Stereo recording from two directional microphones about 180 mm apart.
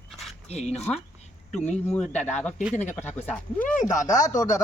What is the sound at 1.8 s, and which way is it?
Speech, 5° left (ahead or behind).